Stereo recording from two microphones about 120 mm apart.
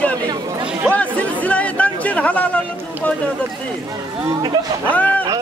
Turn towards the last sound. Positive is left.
turn(degrees=15)  # may be behind; listen again after turning